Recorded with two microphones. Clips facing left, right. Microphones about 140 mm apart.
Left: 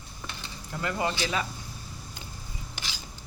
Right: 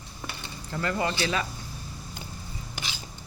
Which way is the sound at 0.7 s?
15° left (ahead or behind).